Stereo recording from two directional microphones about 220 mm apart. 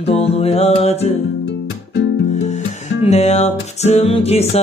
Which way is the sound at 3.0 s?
30° left (ahead or behind).